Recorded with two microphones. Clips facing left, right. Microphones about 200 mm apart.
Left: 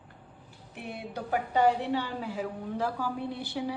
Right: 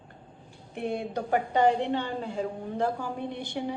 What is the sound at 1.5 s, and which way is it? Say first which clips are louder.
A woman's voice: right 1 dB; 5° left (ahead or behind).